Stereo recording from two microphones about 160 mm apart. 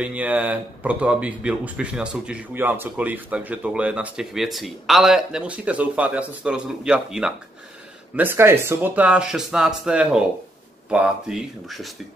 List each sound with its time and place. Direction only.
0.0 s speech: 10° right (ahead or behind)